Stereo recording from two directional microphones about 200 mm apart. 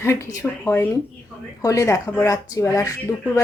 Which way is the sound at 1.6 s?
15° left (ahead or behind).